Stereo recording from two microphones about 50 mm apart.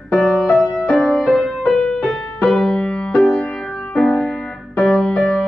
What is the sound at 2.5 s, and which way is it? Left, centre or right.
Music, centre.